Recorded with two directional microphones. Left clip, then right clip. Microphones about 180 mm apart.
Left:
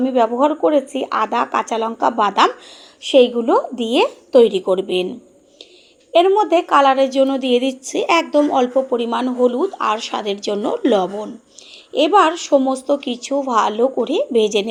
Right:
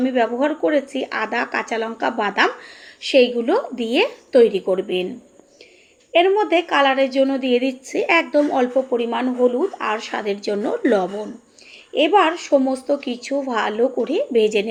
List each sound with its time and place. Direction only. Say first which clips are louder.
0.0 s a woman's voice: left 4 dB; 25° left (ahead or behind)
6.1 s a woman's voice: left 3 dB; 30° left (ahead or behind)
8.9 s a woman's voice: left 2 dB; 30° left (ahead or behind)
11.9 s a woman's voice: left 2 dB; 30° left (ahead or behind)